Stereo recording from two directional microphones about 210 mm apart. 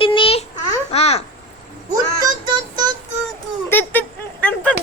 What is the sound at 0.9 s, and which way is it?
Babbling, 30° left (ahead or behind).